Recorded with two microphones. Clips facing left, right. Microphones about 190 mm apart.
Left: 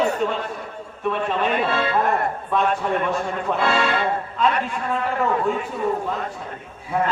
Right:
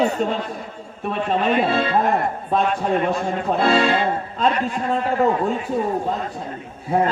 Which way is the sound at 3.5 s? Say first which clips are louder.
Right 4 dB; 40° right (ahead or behind).